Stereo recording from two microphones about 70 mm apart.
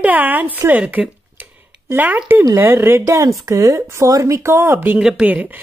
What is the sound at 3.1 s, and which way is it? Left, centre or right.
Speech, right.